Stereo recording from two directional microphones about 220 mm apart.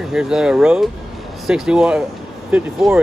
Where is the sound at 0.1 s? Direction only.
Centre (ahead or behind).